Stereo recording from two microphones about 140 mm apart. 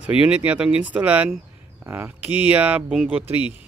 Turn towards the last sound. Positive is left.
turn(degrees=-10)  # may be behind; listen again after turning